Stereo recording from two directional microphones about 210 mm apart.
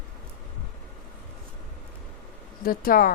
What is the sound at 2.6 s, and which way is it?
Speech, 45° left (ahead or behind).